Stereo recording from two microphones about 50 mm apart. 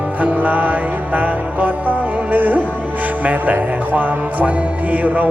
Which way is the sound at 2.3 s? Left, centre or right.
Right.